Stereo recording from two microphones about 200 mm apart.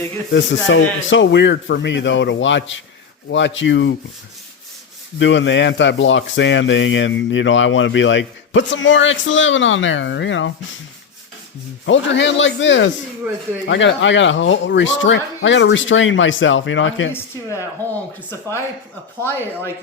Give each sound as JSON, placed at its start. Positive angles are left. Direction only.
{"t": 0.3, "sound": "a man's voice", "side_deg": 65}
{"t": 5.2, "sound": "speech", "side_deg": 65}
{"t": 11.9, "sound": "a man's voice", "side_deg": 65}
{"t": 17.1, "sound": "speech", "side_deg": 10}
{"t": 19.2, "sound": "speech", "side_deg": 10}